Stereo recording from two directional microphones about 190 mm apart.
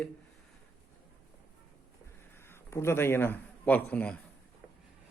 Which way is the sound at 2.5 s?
15° left (ahead or behind).